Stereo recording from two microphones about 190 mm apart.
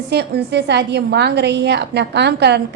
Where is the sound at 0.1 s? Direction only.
60° right (ahead or behind).